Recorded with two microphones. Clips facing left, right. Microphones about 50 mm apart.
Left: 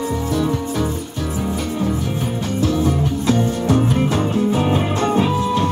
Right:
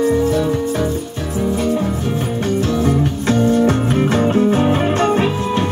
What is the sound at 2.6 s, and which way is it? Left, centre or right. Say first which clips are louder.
Music: left 1 dB; right.